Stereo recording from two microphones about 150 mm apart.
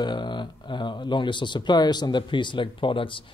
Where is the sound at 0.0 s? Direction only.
30° left (ahead or behind).